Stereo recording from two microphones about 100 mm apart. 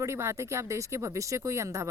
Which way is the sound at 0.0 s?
25° right (ahead or behind).